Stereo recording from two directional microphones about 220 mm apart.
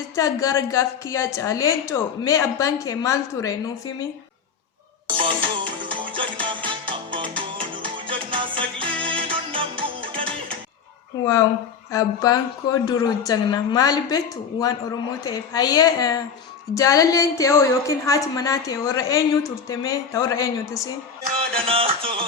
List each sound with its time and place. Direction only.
0.2 s a woman's voice: 15° left (ahead or behind)
5.0 s music: 20° right (ahead or behind)
11.9 s a woman's voice: 15° left (ahead or behind)
21.5 s music: 25° right (ahead or behind)